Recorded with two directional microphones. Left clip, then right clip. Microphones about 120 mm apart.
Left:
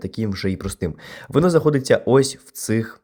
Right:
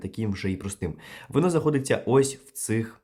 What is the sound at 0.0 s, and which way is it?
Speech, 50° left (ahead or behind).